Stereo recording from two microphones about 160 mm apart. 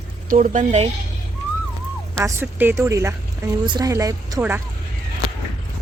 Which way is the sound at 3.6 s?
30° right (ahead or behind).